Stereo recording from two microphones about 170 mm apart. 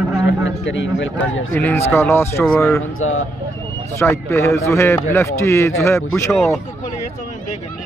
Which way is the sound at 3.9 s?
15° left (ahead or behind).